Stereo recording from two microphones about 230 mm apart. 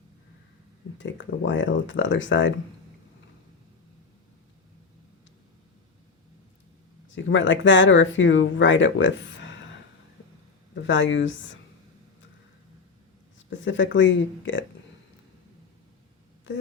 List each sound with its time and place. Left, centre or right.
0.9 s speech: left
7.1 s speech: left
10.8 s speech: left
13.5 s speech: left
16.5 s speech: left